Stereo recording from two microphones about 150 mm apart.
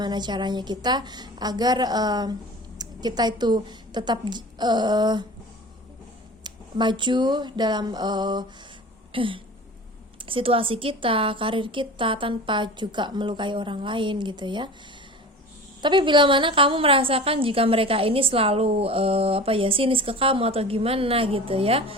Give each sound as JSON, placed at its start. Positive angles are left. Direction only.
{"t": 0.0, "sound": "a woman's voice", "side_deg": -30}
{"t": 6.4, "sound": "a woman's voice", "side_deg": -30}
{"t": 15.8, "sound": "a woman's voice", "side_deg": -30}